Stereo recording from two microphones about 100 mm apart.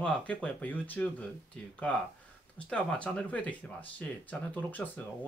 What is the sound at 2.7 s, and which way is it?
Speech, 10° left (ahead or behind).